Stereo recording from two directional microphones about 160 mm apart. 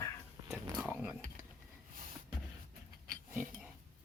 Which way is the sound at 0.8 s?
10° right (ahead or behind).